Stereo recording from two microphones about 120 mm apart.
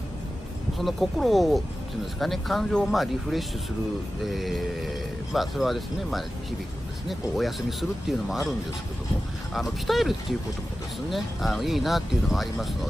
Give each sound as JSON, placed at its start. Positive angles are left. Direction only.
{"t": 0.7, "sound": "speech", "side_deg": 0}